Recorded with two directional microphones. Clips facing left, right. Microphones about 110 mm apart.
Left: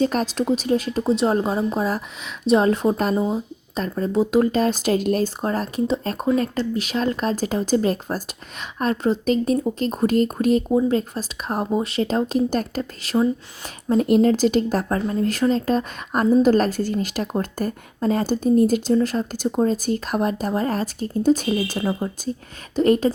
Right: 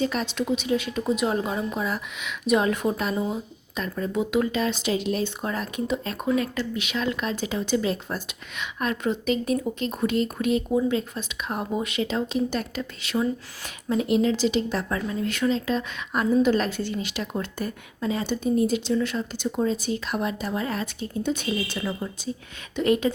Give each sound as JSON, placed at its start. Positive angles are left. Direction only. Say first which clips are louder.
{"t": 0.0, "sound": "a woman's voice", "louder": "left 5 dB", "side_deg": 40}
{"t": 10.7, "sound": "speech", "louder": "left 4 dB", "side_deg": 25}
{"t": 10.9, "sound": "a woman's voice", "louder": "left 4 dB", "side_deg": 40}